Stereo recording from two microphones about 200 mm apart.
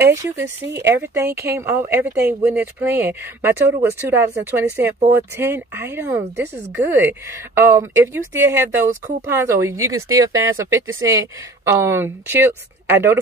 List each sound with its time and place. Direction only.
0.0 s speech: 15° right (ahead or behind)